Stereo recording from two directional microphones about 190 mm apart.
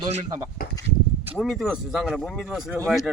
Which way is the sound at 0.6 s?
55° left (ahead or behind).